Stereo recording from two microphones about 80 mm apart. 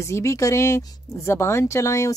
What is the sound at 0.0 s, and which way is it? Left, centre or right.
Speech, left.